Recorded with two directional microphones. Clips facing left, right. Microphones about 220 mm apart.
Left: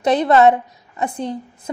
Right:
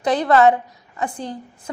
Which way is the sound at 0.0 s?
20° left (ahead or behind).